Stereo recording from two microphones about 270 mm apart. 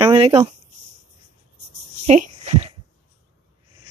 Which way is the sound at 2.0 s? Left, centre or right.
Right.